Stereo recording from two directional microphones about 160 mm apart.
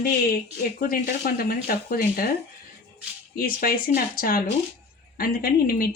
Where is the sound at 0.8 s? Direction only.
65° left (ahead or behind).